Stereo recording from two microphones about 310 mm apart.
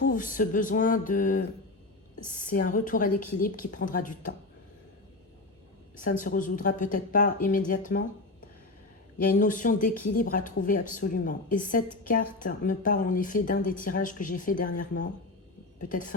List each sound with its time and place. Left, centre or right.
0.1 s speech: left
2.8 s speech: left
6.0 s speech: left
9.3 s speech: left